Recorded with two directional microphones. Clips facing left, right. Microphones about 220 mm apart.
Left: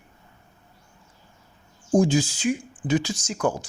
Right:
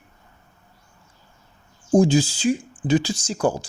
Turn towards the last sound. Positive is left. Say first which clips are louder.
# right 3 dB
turn(degrees=-30)  # may be behind; listen again after turning